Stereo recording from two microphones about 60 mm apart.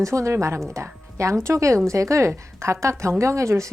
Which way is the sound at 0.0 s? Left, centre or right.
Right.